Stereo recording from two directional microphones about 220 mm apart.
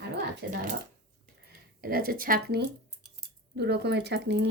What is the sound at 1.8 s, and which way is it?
Speech, 40° right (ahead or behind).